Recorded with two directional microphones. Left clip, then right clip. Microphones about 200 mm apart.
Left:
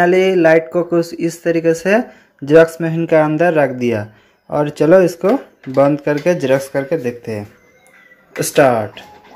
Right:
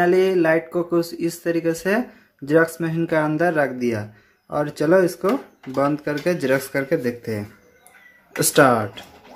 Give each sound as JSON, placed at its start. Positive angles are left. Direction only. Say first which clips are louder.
{"t": 0.0, "sound": "speech", "louder": "left 6 dB", "side_deg": 10}
{"t": 6.4, "sound": "speech", "louder": "left 5 dB", "side_deg": 0}